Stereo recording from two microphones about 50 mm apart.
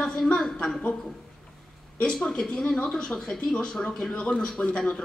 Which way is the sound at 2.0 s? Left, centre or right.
Centre.